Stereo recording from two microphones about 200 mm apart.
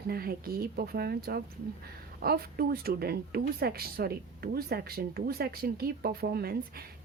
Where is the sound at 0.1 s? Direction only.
50° right (ahead or behind).